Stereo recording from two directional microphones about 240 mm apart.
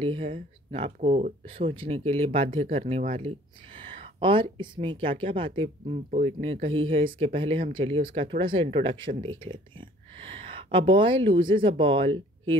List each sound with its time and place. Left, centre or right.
0.0 s speech: right